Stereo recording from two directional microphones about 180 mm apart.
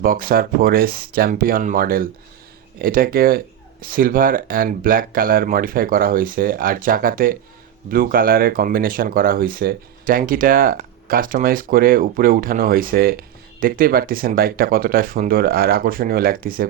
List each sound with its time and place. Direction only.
0.0 s speech: 55° right (ahead or behind)